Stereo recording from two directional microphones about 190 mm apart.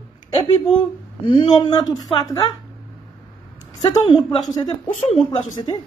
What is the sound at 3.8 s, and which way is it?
Speech, 20° left (ahead or behind).